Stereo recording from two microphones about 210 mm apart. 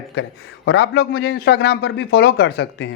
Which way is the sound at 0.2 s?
60° left (ahead or behind).